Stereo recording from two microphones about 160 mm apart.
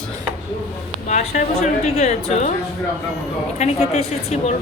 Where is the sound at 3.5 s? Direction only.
45° left (ahead or behind).